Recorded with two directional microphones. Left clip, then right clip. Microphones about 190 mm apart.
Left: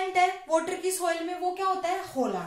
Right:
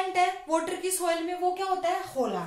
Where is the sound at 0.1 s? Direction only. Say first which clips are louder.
Left 4 dB; 25° right (ahead or behind).